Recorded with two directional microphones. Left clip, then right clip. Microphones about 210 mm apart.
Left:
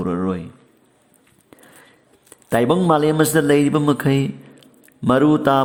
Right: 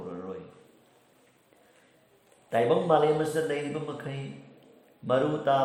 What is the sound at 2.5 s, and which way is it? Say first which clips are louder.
Speech: left 7 dB; 45° left (ahead or behind).